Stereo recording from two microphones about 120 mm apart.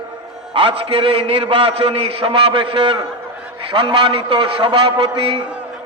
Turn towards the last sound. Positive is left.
turn(degrees=-45)  # may be behind; listen again after turning